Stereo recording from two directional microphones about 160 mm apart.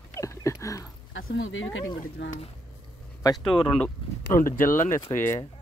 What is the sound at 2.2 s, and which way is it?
Speech, 90° left.